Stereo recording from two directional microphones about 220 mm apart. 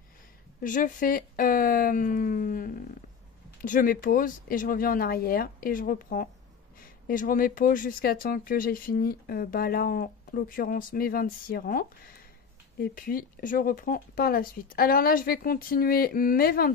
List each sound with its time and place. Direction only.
0.6 s speech: 35° left (ahead or behind)